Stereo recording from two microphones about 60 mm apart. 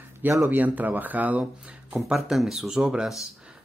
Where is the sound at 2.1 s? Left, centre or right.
Centre.